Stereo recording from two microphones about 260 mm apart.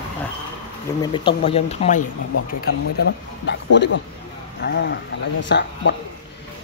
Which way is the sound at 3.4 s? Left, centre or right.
Left.